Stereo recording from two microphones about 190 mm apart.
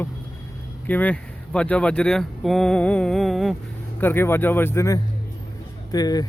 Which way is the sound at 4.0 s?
10° left (ahead or behind).